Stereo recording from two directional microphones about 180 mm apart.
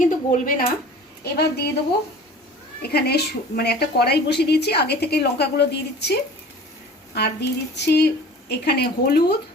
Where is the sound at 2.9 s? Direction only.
60° left (ahead or behind).